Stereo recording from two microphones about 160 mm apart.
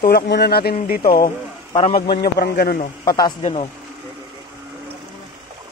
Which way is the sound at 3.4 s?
40° left (ahead or behind).